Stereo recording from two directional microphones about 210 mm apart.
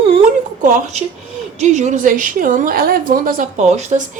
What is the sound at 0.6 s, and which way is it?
A woman's voice, 40° right (ahead or behind).